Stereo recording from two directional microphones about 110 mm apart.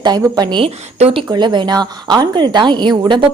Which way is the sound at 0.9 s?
75° right (ahead or behind).